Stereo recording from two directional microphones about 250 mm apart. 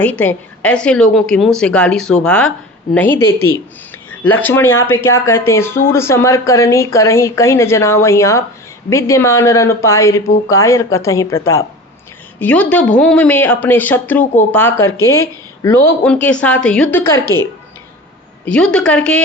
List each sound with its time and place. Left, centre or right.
0.0 s a woman's voice: centre
4.7 s speech: left
5.0 s speech: centre
18.4 s a woman's voice: centre